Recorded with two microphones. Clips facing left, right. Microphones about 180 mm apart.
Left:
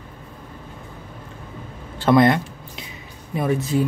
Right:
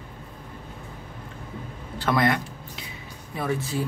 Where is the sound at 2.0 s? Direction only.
25° left (ahead or behind).